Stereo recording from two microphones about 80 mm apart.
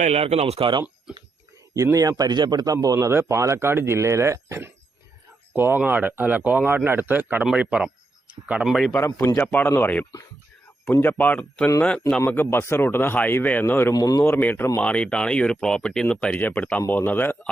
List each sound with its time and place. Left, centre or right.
0.6 s speech: right
1.7 s a man's voice: right
2.7 s a man's voice: right
3.1 s a man's voice: right; by 8.6 s centre
8.6 s a man's voice: centre
9.0 s speech: left
9.4 s speech: left
10.9 s speech: left
13.9 s speech: left
14.3 s speech: left
14.8 s speech: centre